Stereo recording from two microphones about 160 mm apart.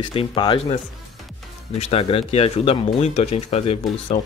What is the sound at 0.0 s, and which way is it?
Speech, 35° left (ahead or behind).